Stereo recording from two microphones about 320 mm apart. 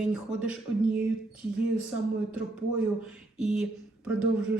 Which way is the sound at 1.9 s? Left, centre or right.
Left.